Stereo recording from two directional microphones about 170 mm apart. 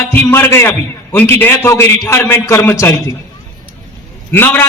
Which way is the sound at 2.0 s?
15° left (ahead or behind).